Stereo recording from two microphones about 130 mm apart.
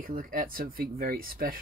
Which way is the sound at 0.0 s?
90° right.